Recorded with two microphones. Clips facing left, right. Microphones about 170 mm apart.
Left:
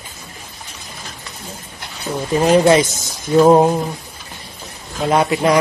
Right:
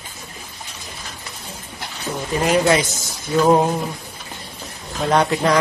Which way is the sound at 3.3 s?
25° left (ahead or behind).